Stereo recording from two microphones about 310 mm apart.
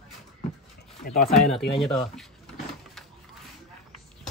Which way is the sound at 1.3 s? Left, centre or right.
Centre.